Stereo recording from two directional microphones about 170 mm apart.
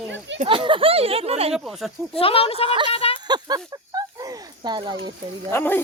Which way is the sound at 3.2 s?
25° right (ahead or behind).